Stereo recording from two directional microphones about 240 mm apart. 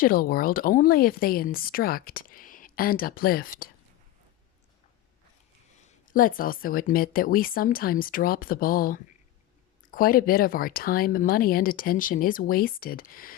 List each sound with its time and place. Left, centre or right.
0.0 s speech: left
5.8 s speech: left